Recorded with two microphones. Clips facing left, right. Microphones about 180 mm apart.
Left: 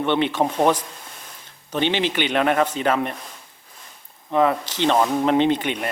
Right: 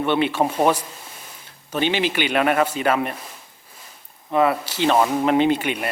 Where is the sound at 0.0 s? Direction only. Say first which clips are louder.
Even; 10° right (ahead or behind).